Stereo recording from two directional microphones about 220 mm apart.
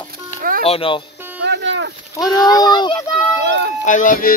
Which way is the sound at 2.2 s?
15° left (ahead or behind).